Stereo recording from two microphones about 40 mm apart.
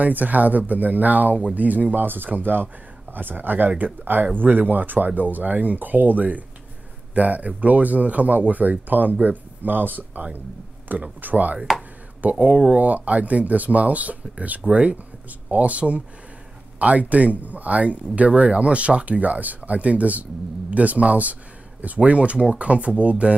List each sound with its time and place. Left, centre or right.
0.0 s speech: right